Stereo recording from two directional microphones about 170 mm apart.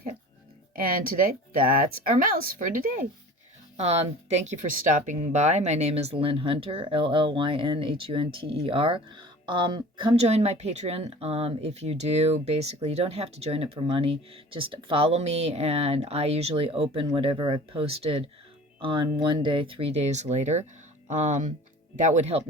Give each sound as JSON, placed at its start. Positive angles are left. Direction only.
{"t": 0.9, "sound": "speech", "side_deg": -60}
{"t": 3.8, "sound": "speech", "side_deg": -40}